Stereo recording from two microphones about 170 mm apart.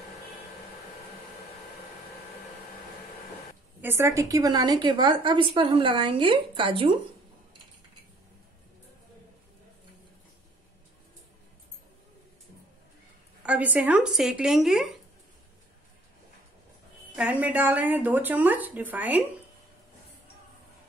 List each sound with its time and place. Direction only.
3.8 s a woman's voice: 15° right (ahead or behind)
13.4 s speech: 10° right (ahead or behind)
17.1 s speech: 10° right (ahead or behind)